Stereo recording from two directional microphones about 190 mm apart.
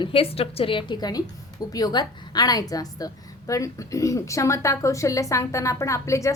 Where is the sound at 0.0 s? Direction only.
30° left (ahead or behind).